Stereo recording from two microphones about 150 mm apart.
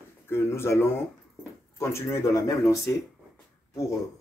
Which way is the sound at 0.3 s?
15° left (ahead or behind).